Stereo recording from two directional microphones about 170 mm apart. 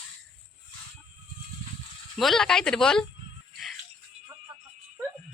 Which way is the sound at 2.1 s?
Centre (ahead or behind).